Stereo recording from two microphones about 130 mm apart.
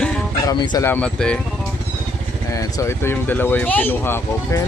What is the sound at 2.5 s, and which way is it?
Speech, 25° left (ahead or behind).